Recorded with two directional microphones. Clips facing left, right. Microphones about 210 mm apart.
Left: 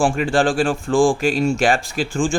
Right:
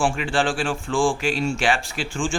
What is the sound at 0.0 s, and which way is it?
Speech, 40° left (ahead or behind).